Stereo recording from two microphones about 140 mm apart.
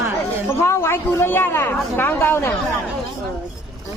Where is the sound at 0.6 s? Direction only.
20° left (ahead or behind).